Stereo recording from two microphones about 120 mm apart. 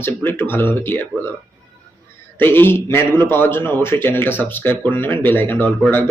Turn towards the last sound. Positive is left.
turn(degrees=15)  # may be behind; listen again after turning